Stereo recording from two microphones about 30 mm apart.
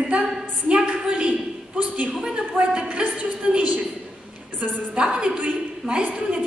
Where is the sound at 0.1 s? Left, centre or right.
Right.